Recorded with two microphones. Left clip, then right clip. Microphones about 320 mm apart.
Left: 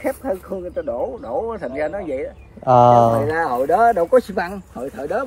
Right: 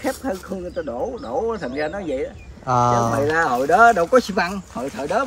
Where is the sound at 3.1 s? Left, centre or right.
Centre.